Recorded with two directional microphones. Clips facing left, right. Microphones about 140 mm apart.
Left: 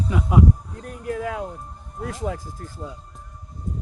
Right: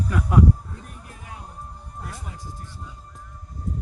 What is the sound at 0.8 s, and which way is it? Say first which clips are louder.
Music: left 15 dB; 90° left.